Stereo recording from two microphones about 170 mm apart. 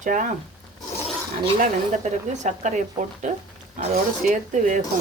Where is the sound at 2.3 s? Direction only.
45° right (ahead or behind).